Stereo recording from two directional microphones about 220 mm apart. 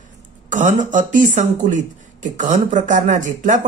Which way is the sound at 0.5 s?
35° right (ahead or behind).